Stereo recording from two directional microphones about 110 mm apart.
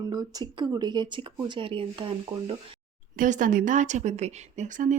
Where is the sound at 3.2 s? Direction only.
90° right.